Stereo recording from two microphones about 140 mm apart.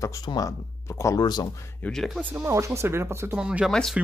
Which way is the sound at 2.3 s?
20° right (ahead or behind).